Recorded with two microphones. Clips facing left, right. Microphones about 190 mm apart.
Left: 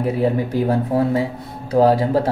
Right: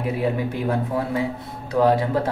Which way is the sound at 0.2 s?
35° left (ahead or behind).